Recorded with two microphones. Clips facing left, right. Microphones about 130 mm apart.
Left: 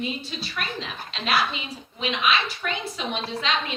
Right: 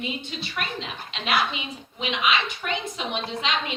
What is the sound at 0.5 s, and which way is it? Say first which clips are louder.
A woman's voice: right 1 dB; 20° right (ahead or behind).